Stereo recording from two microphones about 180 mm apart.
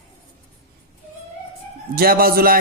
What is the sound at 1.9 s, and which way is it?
Speech, 55° right (ahead or behind).